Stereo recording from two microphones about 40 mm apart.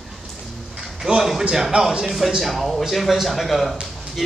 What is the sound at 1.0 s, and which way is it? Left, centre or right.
Speech, centre.